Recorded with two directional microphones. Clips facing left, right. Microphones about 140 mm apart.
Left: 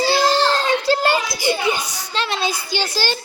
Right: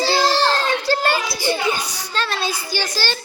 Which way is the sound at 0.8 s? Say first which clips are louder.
Left 2 dB; 20° left (ahead or behind).